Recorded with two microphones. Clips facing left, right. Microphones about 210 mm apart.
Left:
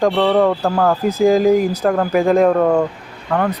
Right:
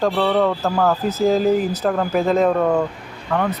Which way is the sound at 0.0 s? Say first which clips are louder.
Left 4 dB; 15° left (ahead or behind).